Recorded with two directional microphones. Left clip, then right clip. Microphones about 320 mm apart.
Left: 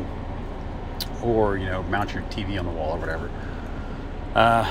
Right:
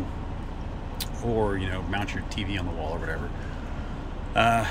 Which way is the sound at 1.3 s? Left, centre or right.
Centre.